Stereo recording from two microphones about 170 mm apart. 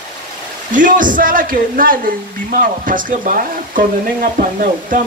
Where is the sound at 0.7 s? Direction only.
50° right (ahead or behind).